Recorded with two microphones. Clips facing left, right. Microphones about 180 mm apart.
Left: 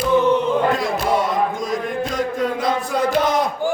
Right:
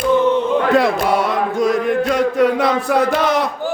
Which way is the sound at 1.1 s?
70° right (ahead or behind).